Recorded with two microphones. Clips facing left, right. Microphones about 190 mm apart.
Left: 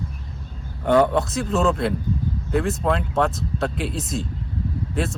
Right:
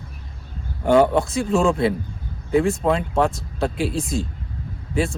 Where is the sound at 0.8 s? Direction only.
30° right (ahead or behind).